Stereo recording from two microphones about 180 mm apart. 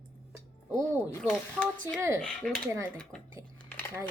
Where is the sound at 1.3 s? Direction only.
10° left (ahead or behind).